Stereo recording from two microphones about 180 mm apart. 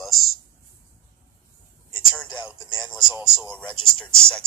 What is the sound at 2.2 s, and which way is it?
Speech, centre (ahead or behind).